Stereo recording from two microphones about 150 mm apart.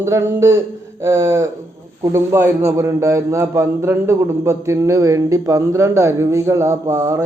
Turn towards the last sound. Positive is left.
turn(degrees=-20)  # may be behind; listen again after turning